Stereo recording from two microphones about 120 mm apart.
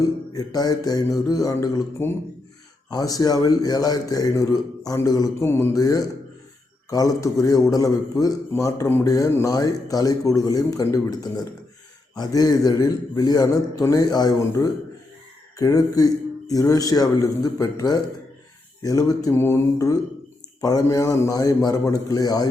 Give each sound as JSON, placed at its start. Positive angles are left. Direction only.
{"t": 0.3, "sound": "a man's voice", "side_deg": 30}
{"t": 2.0, "sound": "a man's voice", "side_deg": 20}
{"t": 2.9, "sound": "a man's voice", "side_deg": 30}
{"t": 5.4, "sound": "a man's voice", "side_deg": 20}
{"t": 5.7, "sound": "a man's voice", "side_deg": 30}